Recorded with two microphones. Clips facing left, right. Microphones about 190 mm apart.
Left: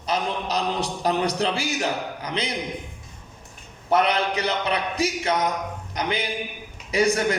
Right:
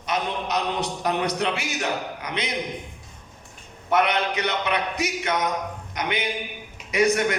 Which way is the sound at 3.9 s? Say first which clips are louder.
Left 1 dB; 30° left (ahead or behind).